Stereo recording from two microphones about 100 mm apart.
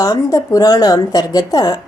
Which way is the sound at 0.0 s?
35° left (ahead or behind).